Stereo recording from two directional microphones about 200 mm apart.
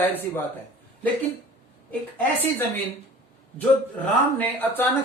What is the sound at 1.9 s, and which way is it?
Speech, 10° left (ahead or behind).